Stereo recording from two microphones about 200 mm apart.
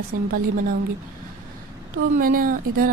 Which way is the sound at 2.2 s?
45° right (ahead or behind).